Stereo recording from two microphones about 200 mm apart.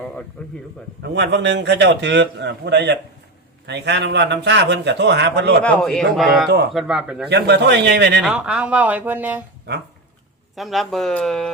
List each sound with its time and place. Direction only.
0.4 s speech: 5° left (ahead or behind)
1.0 s a man's voice: 60° right (ahead or behind)
5.6 s speech: 5° left (ahead or behind)
7.3 s a man's voice: 55° right (ahead or behind)
8.2 s speech: 5° right (ahead or behind)
10.5 s speech: centre (ahead or behind)